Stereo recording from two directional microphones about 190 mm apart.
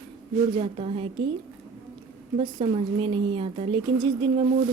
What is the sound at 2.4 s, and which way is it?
Speech, 25° right (ahead or behind).